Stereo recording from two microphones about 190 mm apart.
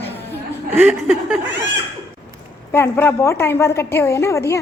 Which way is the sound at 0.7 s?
10° right (ahead or behind).